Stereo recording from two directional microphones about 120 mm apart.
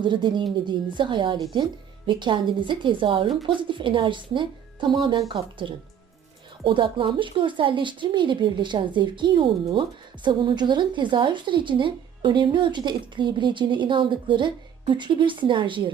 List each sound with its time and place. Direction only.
0.0 s a woman's voice: 40° right (ahead or behind)